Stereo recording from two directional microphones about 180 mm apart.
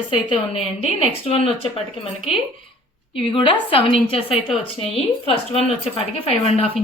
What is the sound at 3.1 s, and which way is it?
A woman's voice, 30° left (ahead or behind).